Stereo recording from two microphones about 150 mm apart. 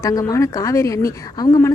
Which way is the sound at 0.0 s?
25° left (ahead or behind).